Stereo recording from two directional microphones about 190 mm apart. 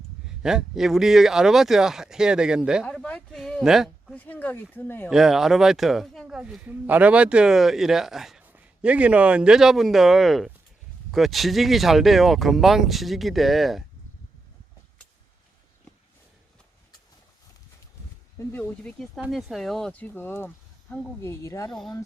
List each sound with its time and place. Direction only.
0.4 s speech: centre (ahead or behind)
5.1 s speech: centre (ahead or behind)
18.3 s speech: 10° left (ahead or behind)
21.7 s speech: centre (ahead or behind)